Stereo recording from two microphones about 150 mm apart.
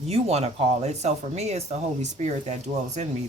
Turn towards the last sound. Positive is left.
turn(degrees=-50)  # may be behind; listen again after turning